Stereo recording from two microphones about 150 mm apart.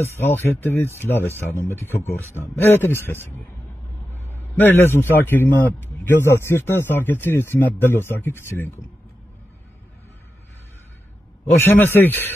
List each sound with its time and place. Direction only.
0.0 s speech: 15° left (ahead or behind)
4.1 s a sound: 15° left (ahead or behind)
5.1 s speech: 15° left (ahead or behind)
11.6 s speech: 15° left (ahead or behind)